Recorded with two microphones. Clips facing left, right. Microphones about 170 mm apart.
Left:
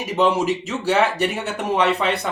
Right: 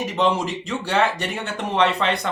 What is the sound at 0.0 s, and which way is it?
Speech, 10° left (ahead or behind).